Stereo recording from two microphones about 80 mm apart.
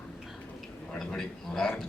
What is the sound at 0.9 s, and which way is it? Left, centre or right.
Speech, centre.